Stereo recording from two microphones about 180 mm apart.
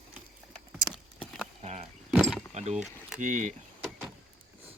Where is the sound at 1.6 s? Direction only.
35° right (ahead or behind).